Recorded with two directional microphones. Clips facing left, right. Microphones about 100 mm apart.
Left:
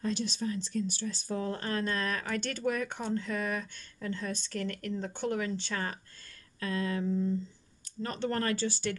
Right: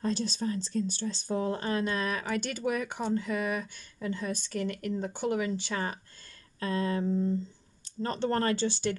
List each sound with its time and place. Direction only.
0.0 s speech: 35° right (ahead or behind); by 5.9 s 15° right (ahead or behind)
6.6 s a sound: 30° right (ahead or behind)
7.8 s speech: 30° right (ahead or behind)